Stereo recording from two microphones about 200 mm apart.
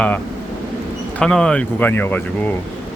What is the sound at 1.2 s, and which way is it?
Speech, 5° left (ahead or behind).